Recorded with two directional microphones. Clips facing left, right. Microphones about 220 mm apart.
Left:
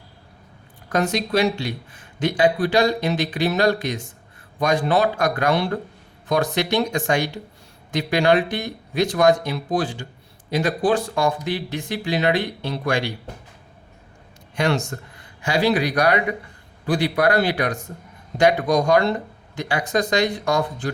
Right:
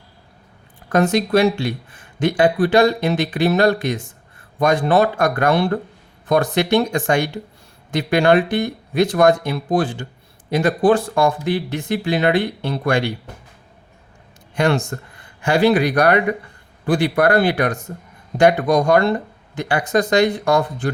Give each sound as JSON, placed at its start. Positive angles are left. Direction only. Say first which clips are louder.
{"t": 0.9, "sound": "speech", "louder": "right 5 dB", "side_deg": -55}
{"t": 14.5, "sound": "speech", "louder": "right 4 dB", "side_deg": -55}